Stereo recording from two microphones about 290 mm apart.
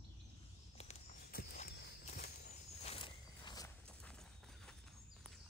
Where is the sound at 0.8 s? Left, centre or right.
Left.